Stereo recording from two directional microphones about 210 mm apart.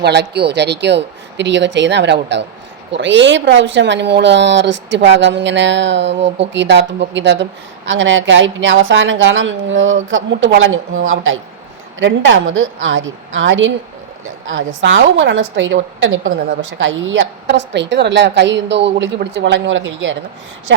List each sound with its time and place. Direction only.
0.0 s a woman's voice: 55° right (ahead or behind)